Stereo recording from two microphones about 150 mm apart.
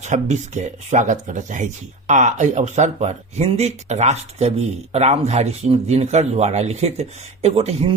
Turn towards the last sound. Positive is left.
turn(degrees=-45)  # may be behind; listen again after turning